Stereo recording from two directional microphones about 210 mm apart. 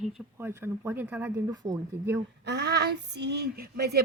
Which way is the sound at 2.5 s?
50° right (ahead or behind).